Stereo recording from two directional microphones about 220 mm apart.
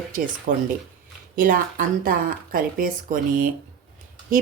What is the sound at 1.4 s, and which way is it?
A woman's voice, 40° right (ahead or behind).